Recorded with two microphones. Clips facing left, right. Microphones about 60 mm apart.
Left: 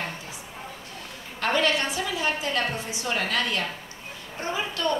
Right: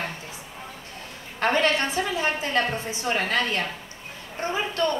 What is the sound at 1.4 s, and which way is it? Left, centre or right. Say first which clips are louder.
A woman's voice: right 2 dB; right.